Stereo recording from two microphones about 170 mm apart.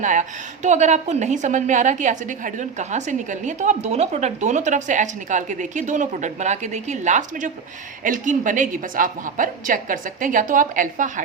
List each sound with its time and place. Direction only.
0.0 s a woman's voice: 50° right (ahead or behind)